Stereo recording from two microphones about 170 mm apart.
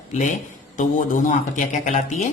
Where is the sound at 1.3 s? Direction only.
45° left (ahead or behind).